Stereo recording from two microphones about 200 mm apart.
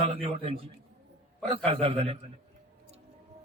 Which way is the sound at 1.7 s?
30° right (ahead or behind).